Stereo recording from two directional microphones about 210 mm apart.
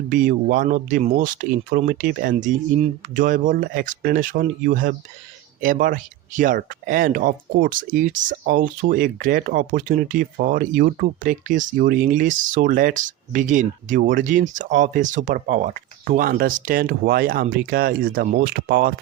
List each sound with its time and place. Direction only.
0.1 s speech: 40° right (ahead or behind)